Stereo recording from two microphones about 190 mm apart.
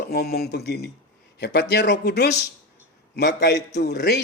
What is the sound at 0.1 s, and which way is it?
Speech, 55° left (ahead or behind).